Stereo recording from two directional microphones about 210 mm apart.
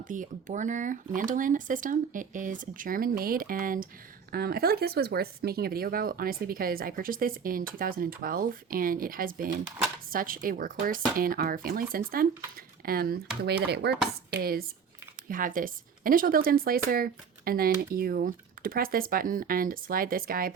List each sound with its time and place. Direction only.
0.0 s speech: 40° right (ahead or behind)
15.3 s speech: 40° right (ahead or behind)